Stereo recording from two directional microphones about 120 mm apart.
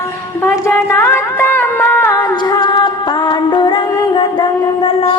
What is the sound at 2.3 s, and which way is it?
Music, 35° left (ahead or behind).